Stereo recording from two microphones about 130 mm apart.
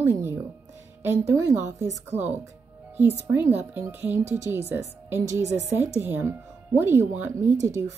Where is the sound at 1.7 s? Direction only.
20° right (ahead or behind).